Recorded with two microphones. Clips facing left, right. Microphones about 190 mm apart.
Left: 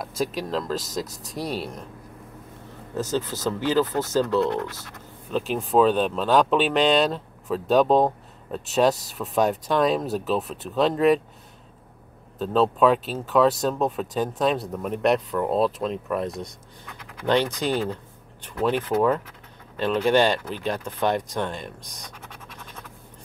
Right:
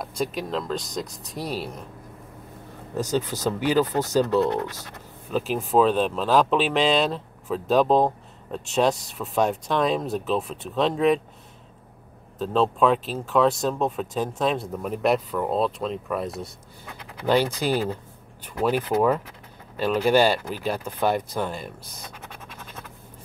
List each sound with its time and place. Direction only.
0.0 s speech: centre (ahead or behind)
3.0 s speech: 15° right (ahead or behind)
5.3 s speech: centre (ahead or behind)
12.4 s speech: centre (ahead or behind)
17.6 s speech: 10° right (ahead or behind)